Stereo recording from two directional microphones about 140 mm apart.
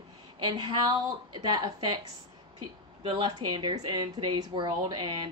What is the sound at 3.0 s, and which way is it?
Speech, 35° right (ahead or behind).